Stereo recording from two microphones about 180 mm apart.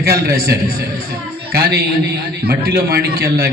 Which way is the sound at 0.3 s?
55° right (ahead or behind).